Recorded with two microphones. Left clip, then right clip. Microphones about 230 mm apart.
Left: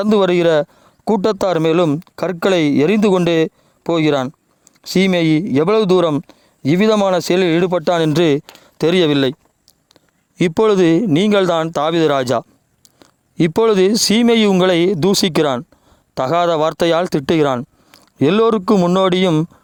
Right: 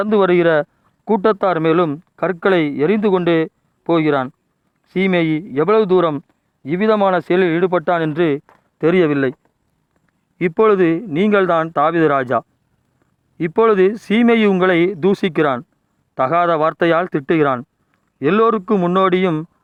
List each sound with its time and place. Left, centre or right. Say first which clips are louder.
0.0 s speech: even; left